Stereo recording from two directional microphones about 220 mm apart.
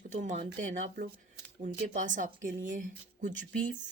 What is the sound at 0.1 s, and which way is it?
Speech, 35° right (ahead or behind).